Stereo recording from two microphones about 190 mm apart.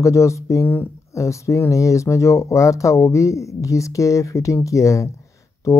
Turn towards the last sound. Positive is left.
turn(degrees=15)  # may be behind; listen again after turning